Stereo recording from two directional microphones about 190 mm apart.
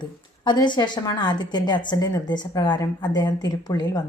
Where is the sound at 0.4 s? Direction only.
25° left (ahead or behind).